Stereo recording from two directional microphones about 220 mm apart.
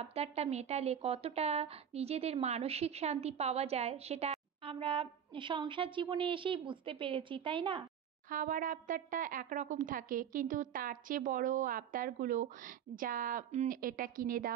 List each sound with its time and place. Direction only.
0.0 s speech: 30° right (ahead or behind)
8.3 s speech: 35° right (ahead or behind)